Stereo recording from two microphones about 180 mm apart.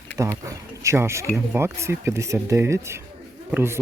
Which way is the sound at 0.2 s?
20° right (ahead or behind).